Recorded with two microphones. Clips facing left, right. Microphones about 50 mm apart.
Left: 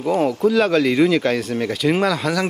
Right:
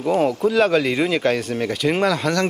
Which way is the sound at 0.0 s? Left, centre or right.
Centre.